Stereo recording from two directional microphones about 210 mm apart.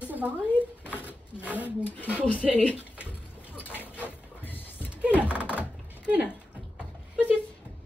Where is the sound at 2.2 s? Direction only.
10° left (ahead or behind).